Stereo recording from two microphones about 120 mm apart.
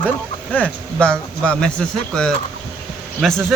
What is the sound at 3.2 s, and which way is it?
Speech, centre (ahead or behind).